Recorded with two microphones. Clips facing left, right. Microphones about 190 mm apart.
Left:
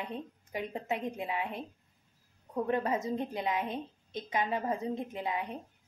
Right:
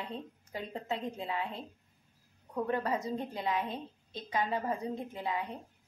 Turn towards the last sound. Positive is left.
turn(degrees=20)  # may be behind; listen again after turning